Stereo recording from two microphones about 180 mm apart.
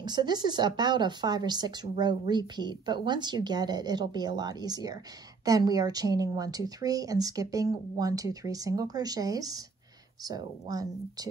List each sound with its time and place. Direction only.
0.0 s speech: 25° right (ahead or behind)